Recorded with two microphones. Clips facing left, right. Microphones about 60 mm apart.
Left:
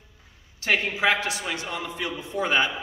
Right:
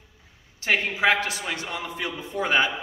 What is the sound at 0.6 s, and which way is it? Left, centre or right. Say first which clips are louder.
A man's voice: even; right.